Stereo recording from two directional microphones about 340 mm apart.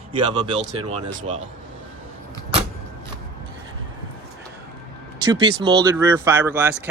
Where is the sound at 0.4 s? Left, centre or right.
Centre.